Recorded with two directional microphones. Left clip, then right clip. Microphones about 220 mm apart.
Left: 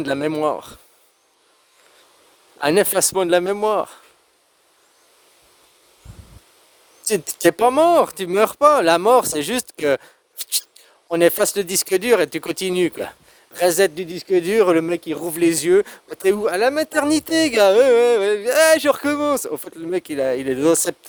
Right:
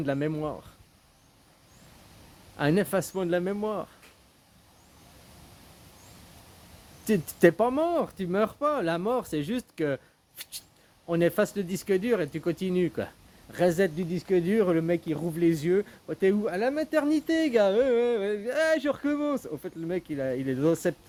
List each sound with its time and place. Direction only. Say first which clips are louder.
0.0 s speech: left 10 dB; 50° left (ahead or behind)
2.6 s speech: left 9 dB; 50° left (ahead or behind)
7.0 s speech: left 5 dB; 50° left (ahead or behind)